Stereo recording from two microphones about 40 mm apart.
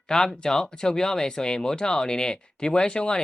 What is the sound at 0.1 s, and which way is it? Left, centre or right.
Speech, centre.